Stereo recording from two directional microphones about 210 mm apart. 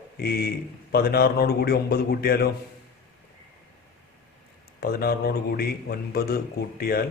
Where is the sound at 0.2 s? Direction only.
45° left (ahead or behind).